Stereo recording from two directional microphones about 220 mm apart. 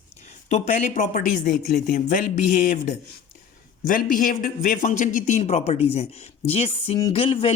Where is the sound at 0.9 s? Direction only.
40° left (ahead or behind).